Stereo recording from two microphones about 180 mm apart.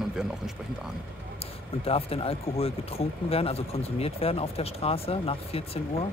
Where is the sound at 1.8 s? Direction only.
30° left (ahead or behind).